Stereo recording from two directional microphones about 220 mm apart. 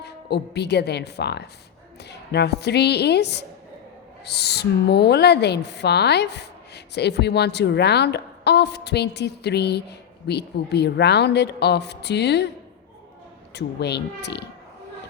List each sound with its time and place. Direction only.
0.0 s speech: 50° left (ahead or behind)
13.5 s speech: 50° left (ahead or behind)